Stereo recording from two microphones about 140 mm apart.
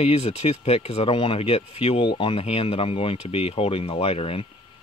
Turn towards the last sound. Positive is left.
turn(degrees=45)  # may be behind; listen again after turning